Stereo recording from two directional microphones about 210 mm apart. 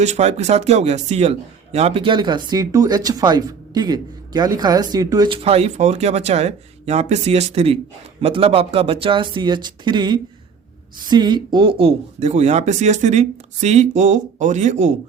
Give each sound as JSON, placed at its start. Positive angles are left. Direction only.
{"t": 0.0, "sound": "speech", "side_deg": -30}